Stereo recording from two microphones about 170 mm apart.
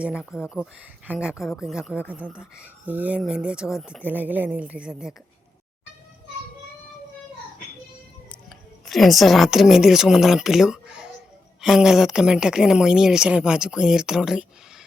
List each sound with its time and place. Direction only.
0.0 s speech: 5° right (ahead or behind)
8.9 s speech: centre (ahead or behind)